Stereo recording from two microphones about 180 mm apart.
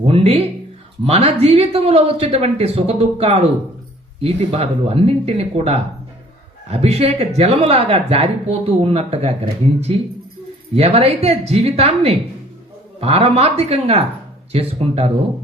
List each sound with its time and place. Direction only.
0.0 s a man's voice: 35° right (ahead or behind)